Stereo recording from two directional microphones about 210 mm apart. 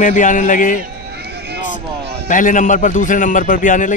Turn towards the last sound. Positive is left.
turn(degrees=40)  # may be behind; listen again after turning